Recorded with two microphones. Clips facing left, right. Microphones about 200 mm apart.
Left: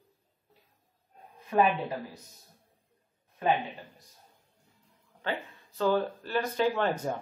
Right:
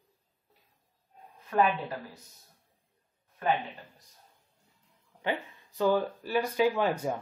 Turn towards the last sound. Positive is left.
turn(degrees=-10)  # may be behind; listen again after turning